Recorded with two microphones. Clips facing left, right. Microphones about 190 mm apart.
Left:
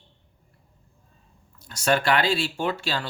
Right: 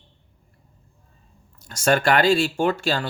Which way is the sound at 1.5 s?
45° right (ahead or behind).